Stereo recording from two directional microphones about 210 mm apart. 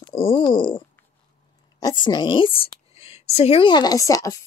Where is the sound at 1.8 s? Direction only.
20° left (ahead or behind).